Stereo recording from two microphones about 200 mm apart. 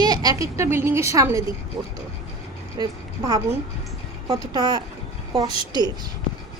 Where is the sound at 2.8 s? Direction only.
20° right (ahead or behind).